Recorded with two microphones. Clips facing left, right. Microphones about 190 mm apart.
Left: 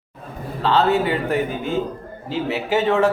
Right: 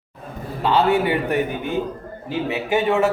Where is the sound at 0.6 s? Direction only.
15° right (ahead or behind).